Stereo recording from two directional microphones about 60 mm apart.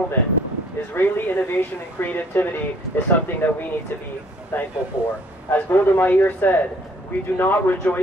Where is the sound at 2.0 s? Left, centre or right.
Left.